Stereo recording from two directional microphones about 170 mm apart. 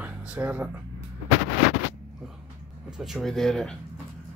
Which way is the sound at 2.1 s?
5° right (ahead or behind).